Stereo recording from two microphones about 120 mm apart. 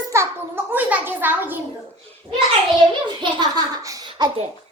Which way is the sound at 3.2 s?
40° right (ahead or behind).